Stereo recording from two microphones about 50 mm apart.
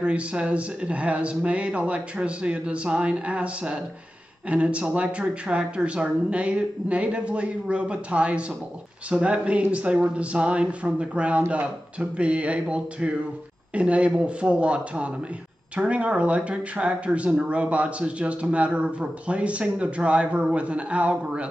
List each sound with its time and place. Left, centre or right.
0.0 s a woman's voice: right